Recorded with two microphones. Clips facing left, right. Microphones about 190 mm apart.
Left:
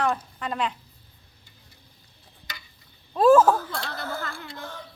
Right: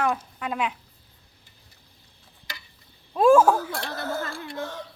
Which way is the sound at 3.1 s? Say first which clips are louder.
Even; 10° right (ahead or behind).